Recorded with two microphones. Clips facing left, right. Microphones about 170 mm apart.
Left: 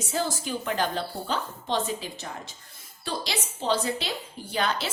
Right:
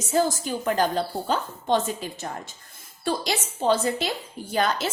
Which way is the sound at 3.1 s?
45° right (ahead or behind).